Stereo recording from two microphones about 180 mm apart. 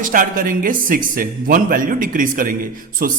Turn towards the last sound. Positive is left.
turn(degrees=-55)  # may be behind; listen again after turning